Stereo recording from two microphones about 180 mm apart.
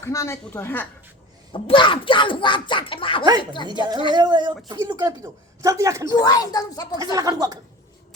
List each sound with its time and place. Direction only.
0.0 s a woman's voice: 15° left (ahead or behind)
1.5 s speech: 30° left (ahead or behind)
4.1 s speech: 25° right (ahead or behind)
6.1 s speech: 20° left (ahead or behind)
7.0 s speech: 20° right (ahead or behind)